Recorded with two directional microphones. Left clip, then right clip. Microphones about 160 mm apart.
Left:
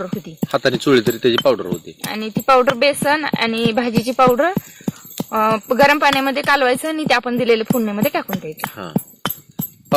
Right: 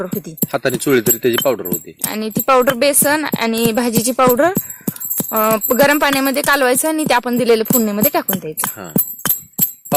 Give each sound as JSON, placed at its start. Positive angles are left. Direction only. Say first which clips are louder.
{"t": 0.4, "sound": "speech", "louder": "left 1 dB", "side_deg": -5}
{"t": 2.0, "sound": "speech", "louder": "even", "side_deg": -70}
{"t": 8.6, "sound": "speech", "louder": "right 1 dB", "side_deg": 0}